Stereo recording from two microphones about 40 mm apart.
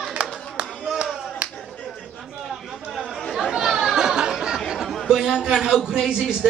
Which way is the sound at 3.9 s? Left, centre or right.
Centre.